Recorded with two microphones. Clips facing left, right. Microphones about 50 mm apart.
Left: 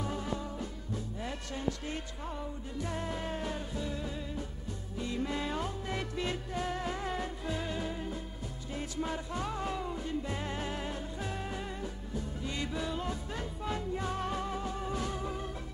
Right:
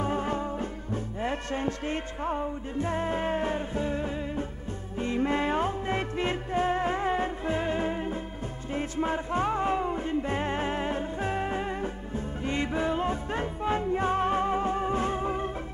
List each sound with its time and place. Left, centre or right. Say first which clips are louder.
0.0 s music: right 8 dB; right